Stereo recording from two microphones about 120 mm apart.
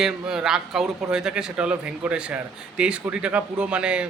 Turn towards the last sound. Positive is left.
turn(degrees=-10)  # may be behind; listen again after turning